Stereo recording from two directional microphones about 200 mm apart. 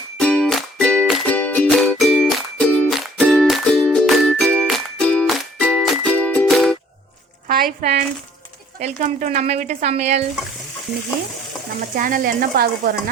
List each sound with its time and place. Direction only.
0.2 s music: 5° left (ahead or behind)
7.4 s a sound: 45° right (ahead or behind)
8.8 s speech: 40° right (ahead or behind)
11.9 s speech: 45° right (ahead or behind)